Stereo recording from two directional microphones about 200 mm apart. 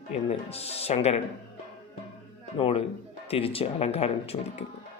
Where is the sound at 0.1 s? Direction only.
30° left (ahead or behind).